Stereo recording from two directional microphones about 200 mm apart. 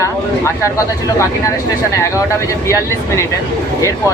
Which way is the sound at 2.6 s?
15° left (ahead or behind).